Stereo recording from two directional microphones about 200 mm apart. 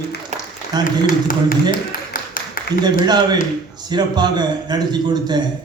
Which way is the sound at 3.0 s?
20° right (ahead or behind).